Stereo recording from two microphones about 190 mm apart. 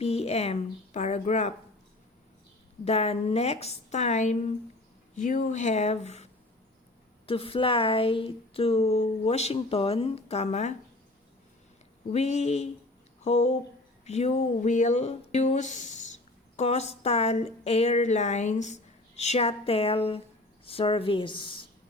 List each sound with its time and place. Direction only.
0.0 s speech: 35° left (ahead or behind)
2.8 s speech: 35° left (ahead or behind)
12.1 s a woman's voice: 35° left (ahead or behind)